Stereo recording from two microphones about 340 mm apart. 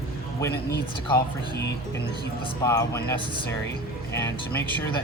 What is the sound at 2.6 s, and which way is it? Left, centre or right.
Speech, centre.